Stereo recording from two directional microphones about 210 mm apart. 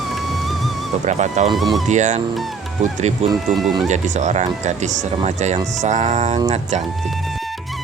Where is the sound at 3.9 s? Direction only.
35° right (ahead or behind).